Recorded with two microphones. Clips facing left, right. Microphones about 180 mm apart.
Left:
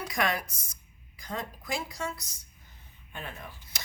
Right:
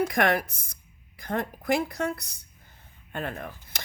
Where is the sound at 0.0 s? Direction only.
55° right (ahead or behind).